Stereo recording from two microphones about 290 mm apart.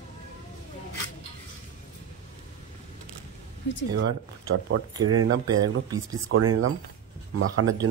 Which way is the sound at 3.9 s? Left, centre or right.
Right.